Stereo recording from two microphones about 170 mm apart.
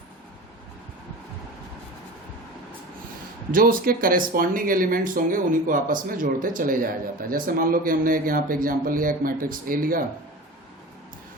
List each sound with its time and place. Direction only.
3.5 s speech: 55° right (ahead or behind)